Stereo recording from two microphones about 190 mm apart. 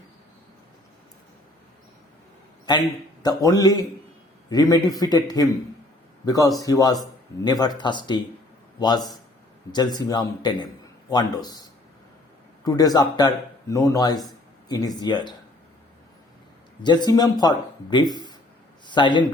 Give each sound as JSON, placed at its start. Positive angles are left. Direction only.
{"t": 2.7, "sound": "a man's voice", "side_deg": 20}
{"t": 12.6, "sound": "a man's voice", "side_deg": 20}
{"t": 16.8, "sound": "a man's voice", "side_deg": 25}